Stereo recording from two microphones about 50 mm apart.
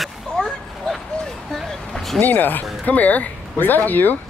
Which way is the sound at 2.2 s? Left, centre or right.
Left.